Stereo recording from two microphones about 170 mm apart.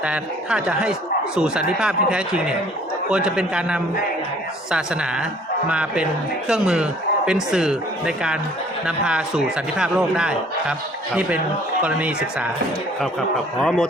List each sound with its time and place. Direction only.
0.0 s speech: 5° right (ahead or behind)
13.0 s speech: centre (ahead or behind)